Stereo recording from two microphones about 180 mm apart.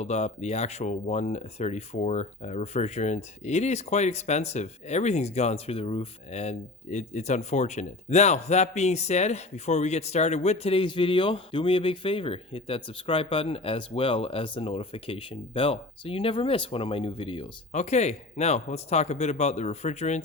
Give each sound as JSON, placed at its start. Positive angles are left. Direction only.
{"t": 0.0, "sound": "speech", "side_deg": 40}
{"t": 17.7, "sound": "speech", "side_deg": 40}